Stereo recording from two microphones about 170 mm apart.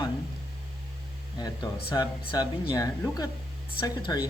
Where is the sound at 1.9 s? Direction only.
25° left (ahead or behind).